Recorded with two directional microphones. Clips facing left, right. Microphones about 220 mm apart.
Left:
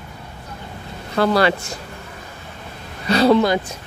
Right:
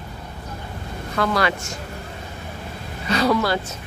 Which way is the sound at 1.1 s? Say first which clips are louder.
Left 5 dB; 30° left (ahead or behind).